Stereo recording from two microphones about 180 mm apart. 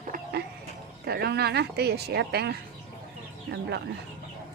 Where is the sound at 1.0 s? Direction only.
60° right (ahead or behind).